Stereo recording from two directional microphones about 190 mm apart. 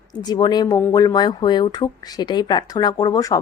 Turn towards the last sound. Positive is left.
turn(degrees=20)  # may be behind; listen again after turning